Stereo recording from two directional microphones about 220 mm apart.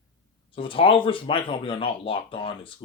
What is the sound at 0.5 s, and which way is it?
Speech, 25° left (ahead or behind).